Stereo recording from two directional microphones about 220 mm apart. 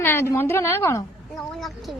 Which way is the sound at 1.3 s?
Centre (ahead or behind).